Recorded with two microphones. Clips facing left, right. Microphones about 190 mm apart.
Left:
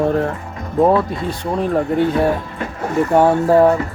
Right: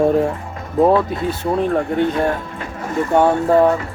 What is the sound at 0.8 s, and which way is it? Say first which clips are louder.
Speech: even; centre (ahead or behind).